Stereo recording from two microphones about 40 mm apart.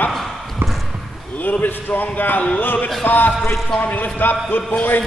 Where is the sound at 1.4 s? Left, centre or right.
Left.